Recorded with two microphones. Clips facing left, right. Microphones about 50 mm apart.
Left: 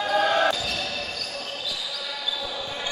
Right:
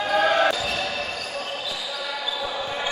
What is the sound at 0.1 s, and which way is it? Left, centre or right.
Basketball bounce, right.